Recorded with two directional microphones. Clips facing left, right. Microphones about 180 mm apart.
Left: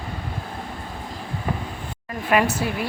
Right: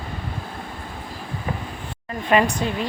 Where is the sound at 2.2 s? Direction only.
10° left (ahead or behind).